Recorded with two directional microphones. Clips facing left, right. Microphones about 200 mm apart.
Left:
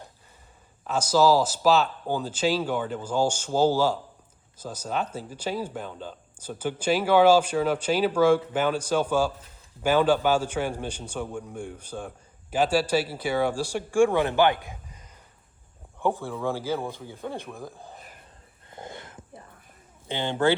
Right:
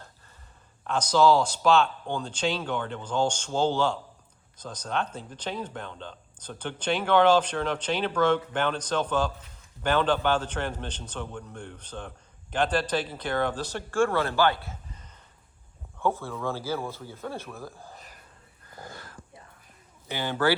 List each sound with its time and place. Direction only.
0.9 s a man's voice: 5° left (ahead or behind)
18.7 s a sound: 20° left (ahead or behind)
20.1 s speech: 25° left (ahead or behind)